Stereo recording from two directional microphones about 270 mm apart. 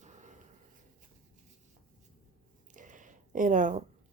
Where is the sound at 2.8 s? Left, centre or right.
Right.